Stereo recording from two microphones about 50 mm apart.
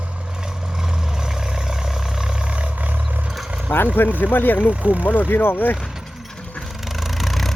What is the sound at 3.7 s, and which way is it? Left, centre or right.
Speech, left.